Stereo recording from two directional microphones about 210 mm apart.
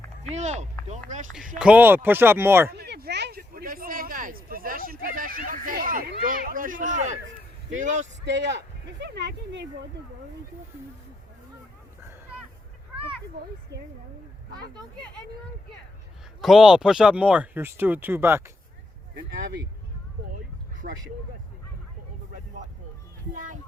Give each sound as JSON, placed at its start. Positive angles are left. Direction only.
{"t": 0.3, "sound": "speech", "side_deg": -35}
{"t": 1.5, "sound": "speech", "side_deg": -5}
{"t": 2.7, "sound": "speech", "side_deg": -50}
{"t": 8.2, "sound": "speech", "side_deg": -55}
{"t": 16.4, "sound": "speech", "side_deg": 0}
{"t": 20.8, "sound": "speech", "side_deg": -40}
{"t": 23.3, "sound": "children playing", "side_deg": -40}